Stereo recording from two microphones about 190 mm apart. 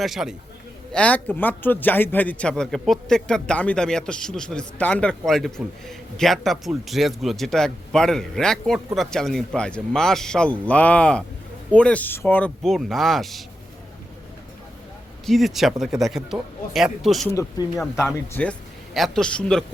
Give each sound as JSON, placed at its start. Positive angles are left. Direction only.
{"t": 0.0, "sound": "a man's voice", "side_deg": 0}
{"t": 15.3, "sound": "a man's voice", "side_deg": 0}
{"t": 17.2, "sound": "a man's voice", "side_deg": 15}